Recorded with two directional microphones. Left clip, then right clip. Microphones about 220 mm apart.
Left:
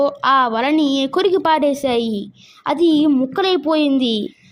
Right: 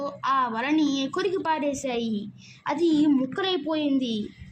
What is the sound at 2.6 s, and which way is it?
A woman's voice, 25° left (ahead or behind).